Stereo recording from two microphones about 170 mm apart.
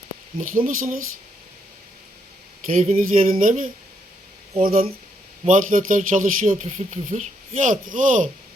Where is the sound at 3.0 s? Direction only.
55° right (ahead or behind).